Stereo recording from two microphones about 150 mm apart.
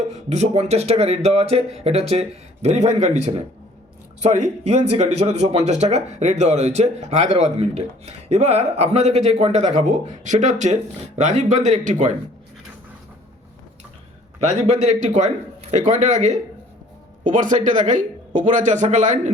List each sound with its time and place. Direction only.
0.1 s speech: 45° right (ahead or behind)
14.4 s a man's voice: 50° right (ahead or behind)